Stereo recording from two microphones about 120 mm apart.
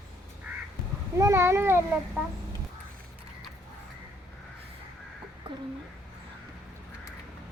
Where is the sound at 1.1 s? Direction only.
25° right (ahead or behind).